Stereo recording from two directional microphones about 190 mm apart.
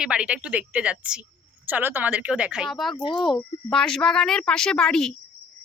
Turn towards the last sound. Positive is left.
turn(degrees=5)  # may be behind; listen again after turning